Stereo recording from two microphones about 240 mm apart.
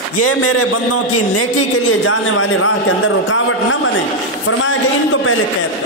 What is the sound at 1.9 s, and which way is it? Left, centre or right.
Speech, left.